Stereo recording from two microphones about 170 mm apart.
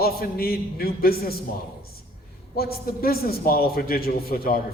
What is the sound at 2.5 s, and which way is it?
A man's voice, 65° left (ahead or behind).